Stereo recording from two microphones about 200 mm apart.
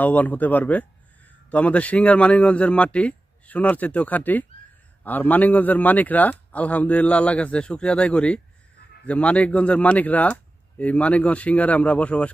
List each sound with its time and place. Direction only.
0.0 s a man's voice: 10° left (ahead or behind)